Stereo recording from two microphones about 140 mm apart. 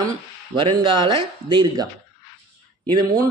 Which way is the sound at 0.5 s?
35° right (ahead or behind).